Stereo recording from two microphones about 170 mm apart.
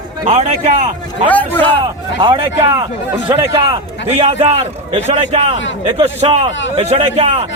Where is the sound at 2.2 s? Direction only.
25° right (ahead or behind).